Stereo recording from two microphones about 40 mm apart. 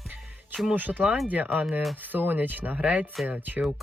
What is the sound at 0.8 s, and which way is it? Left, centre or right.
Speech, right.